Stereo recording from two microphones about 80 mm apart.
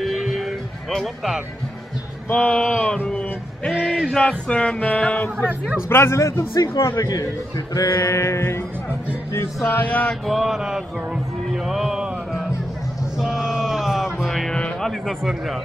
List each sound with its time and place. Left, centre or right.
0.0 s music: centre
2.2 s speech: centre
5.5 s a man's voice: centre
5.9 s a man's voice: left
9.8 s speech: centre
10.2 s mantra: centre
11.5 s a sound: centre
13.2 s music: centre
14.6 s a man's voice: centre